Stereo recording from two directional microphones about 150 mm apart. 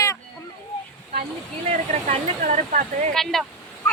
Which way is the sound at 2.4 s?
60° right (ahead or behind).